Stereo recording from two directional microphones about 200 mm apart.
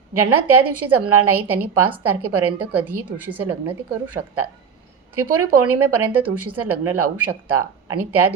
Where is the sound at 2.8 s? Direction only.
10° right (ahead or behind).